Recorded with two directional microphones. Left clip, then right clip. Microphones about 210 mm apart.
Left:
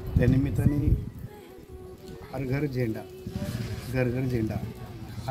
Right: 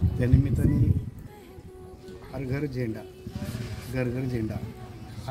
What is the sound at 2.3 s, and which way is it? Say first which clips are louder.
A man's voice: left 2 dB; 5° right (ahead or behind).